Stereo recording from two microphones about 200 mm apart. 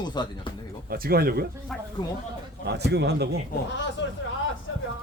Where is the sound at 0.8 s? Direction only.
50° right (ahead or behind).